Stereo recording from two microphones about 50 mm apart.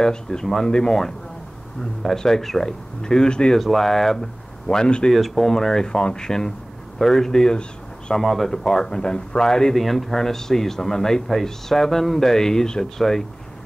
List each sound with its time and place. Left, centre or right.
0.0 s speech: centre
3.5 s speech: centre
5.1 s speech: centre